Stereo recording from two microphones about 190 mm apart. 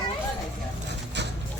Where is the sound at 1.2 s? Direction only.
65° right (ahead or behind).